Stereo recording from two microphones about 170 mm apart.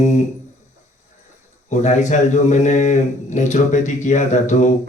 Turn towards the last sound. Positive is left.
turn(degrees=45)  # may be behind; listen again after turning